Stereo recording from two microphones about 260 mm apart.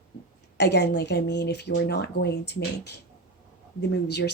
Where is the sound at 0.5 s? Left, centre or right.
Left.